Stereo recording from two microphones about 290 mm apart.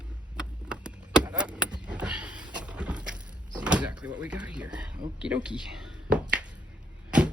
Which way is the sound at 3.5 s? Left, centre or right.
Centre.